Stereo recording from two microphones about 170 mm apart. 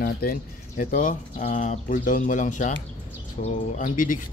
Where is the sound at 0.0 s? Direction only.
60° left (ahead or behind).